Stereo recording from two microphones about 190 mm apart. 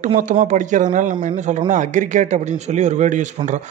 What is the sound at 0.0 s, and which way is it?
A man's voice, 40° right (ahead or behind).